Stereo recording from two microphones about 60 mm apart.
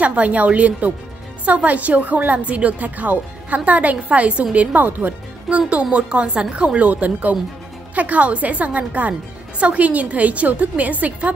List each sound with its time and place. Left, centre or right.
0.0 s a woman's voice: right